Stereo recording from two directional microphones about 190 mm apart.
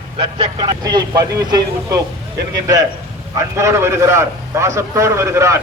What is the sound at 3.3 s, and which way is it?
A man's voice, 15° right (ahead or behind).